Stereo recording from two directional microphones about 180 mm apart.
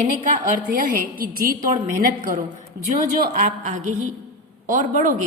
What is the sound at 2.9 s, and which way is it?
A woman's voice, 45° right (ahead or behind).